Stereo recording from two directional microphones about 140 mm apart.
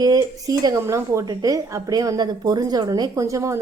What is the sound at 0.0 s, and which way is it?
Speech, 25° right (ahead or behind).